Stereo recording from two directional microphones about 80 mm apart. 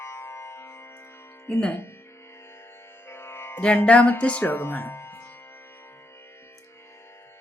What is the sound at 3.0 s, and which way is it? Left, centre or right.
Music, left.